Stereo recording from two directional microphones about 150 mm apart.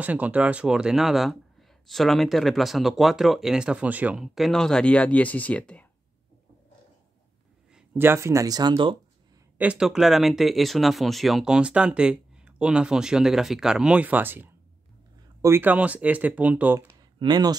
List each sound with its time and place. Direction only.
0.0 s speech: 10° right (ahead or behind); by 5.9 s 10° left (ahead or behind)
8.0 s speech: 15° right (ahead or behind)
9.6 s speech: 5° right (ahead or behind)
17.2 s speech: 25° right (ahead or behind)